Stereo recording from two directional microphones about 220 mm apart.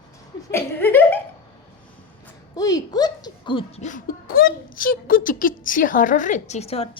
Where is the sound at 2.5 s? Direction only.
15° left (ahead or behind).